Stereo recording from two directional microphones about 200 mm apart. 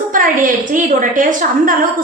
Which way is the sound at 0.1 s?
40° right (ahead or behind).